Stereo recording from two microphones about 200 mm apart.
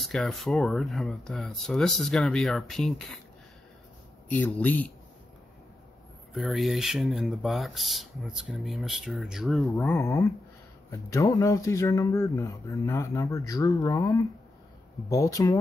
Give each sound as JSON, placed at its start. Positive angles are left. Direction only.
{"t": 0.0, "sound": "speech", "side_deg": 0}
{"t": 4.3, "sound": "speech", "side_deg": 10}
{"t": 6.3, "sound": "speech", "side_deg": 0}
{"t": 9.9, "sound": "speech", "side_deg": 15}